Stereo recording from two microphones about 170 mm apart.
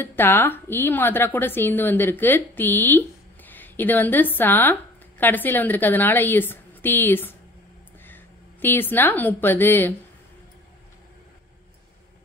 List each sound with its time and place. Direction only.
0.0 s a woman's voice: 10° left (ahead or behind)